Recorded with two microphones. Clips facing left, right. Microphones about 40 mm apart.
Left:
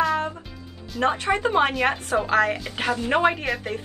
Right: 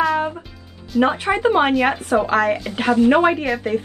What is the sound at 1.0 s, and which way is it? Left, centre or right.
A woman's voice, centre.